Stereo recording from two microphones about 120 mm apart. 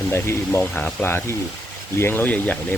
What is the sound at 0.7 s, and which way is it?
Speech, 10° left (ahead or behind).